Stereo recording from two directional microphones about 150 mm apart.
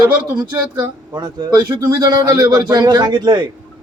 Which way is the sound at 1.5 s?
30° right (ahead or behind).